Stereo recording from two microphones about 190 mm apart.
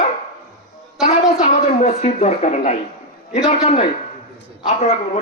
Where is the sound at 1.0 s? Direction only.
35° left (ahead or behind).